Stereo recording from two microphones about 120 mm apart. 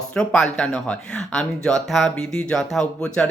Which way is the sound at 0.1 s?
5° left (ahead or behind).